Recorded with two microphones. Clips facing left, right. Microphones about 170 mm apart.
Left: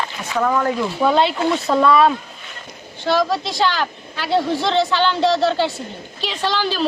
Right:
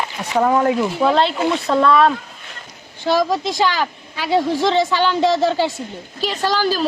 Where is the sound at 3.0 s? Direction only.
15° right (ahead or behind).